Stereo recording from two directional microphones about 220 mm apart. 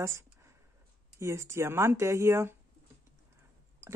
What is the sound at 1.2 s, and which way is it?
Speech, 10° right (ahead or behind).